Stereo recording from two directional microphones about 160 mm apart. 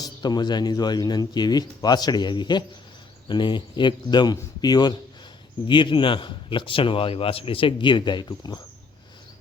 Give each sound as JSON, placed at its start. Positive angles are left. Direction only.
{"t": 0.0, "sound": "speech", "side_deg": 25}